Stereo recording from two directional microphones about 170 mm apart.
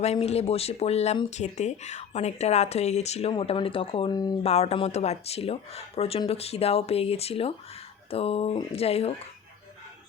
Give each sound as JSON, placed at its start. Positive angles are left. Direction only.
{"t": 0.0, "sound": "speech", "side_deg": 40}
{"t": 4.4, "sound": "speech", "side_deg": 35}